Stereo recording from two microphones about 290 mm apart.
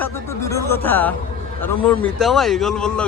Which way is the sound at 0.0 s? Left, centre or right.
Centre.